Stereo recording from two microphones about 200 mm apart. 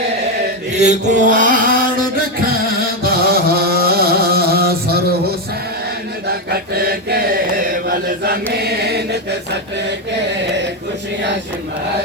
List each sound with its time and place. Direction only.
0.8 s mantra: 40° right (ahead or behind)
2.6 s music: 50° right (ahead or behind)
7.7 s chant: 50° right (ahead or behind)